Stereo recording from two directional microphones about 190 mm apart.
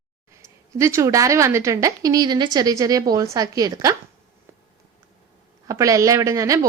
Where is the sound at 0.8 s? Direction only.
15° right (ahead or behind).